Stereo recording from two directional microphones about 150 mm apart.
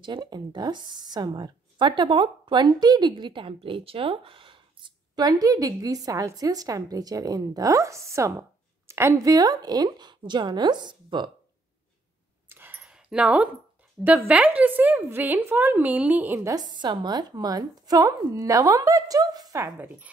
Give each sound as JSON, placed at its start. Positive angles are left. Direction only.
{"t": 0.0, "sound": "speech", "side_deg": -30}
{"t": 12.4, "sound": "a sound", "side_deg": -15}
{"t": 14.0, "sound": "a woman's voice", "side_deg": -10}
{"t": 16.5, "sound": "speech", "side_deg": -30}